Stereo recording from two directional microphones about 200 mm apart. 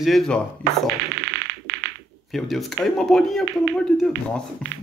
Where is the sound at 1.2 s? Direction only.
55° right (ahead or behind).